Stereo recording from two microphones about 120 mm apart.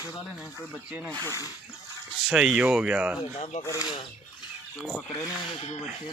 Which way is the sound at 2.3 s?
5° right (ahead or behind).